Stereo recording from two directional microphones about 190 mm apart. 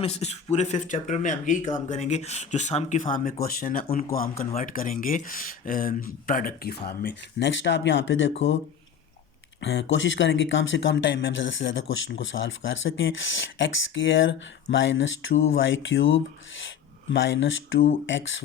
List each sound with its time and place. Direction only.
0.0 s speech: 35° left (ahead or behind); by 8.3 s 80° left
9.6 s speech: 85° left